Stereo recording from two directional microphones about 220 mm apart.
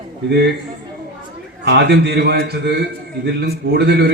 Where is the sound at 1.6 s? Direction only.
50° right (ahead or behind).